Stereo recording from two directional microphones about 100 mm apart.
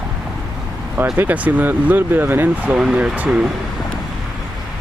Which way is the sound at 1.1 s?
20° right (ahead or behind).